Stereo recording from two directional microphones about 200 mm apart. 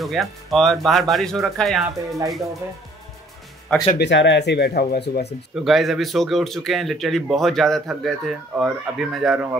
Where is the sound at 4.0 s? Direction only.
60° left (ahead or behind).